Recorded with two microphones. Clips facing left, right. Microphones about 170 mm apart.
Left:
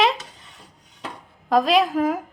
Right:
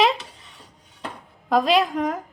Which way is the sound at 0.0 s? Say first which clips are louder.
Right 1 dB; centre (ahead or behind).